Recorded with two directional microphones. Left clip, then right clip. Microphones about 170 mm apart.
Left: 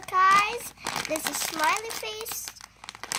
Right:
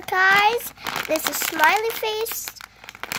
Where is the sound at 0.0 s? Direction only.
50° right (ahead or behind).